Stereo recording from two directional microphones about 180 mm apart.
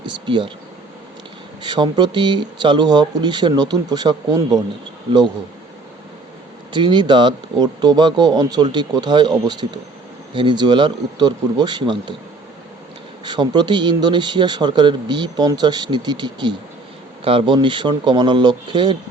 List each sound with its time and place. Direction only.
0.0 s a sound: 25° right (ahead or behind)
1.6 s speech: 25° right (ahead or behind)
6.7 s speech: 25° right (ahead or behind)
13.2 s speech: 25° right (ahead or behind)